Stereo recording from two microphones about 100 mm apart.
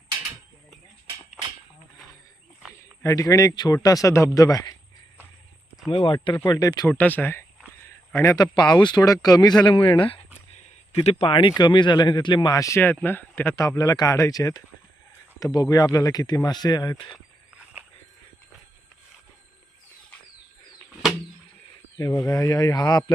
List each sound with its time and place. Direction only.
3.0 s a man's voice: 30° left (ahead or behind)
5.9 s speech: 60° left (ahead or behind)
6.5 s a man's voice: 40° left (ahead or behind)
6.8 s speech: 20° left (ahead or behind)
7.9 s a sound: 30° left (ahead or behind)
8.4 s a man's voice: 45° left (ahead or behind)
9.6 s speech: 60° left (ahead or behind)
10.9 s speech: 80° left
11.3 s a man's voice: 60° left (ahead or behind)
12.5 s a man's voice: 35° left (ahead or behind)
12.8 s a man's voice: 20° left (ahead or behind); by 17.2 s 50° left (ahead or behind)
21.9 s a man's voice: 35° left (ahead or behind)